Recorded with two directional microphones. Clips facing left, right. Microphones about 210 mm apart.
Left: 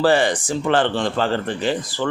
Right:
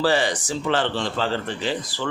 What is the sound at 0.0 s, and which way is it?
A man's voice, 55° left (ahead or behind).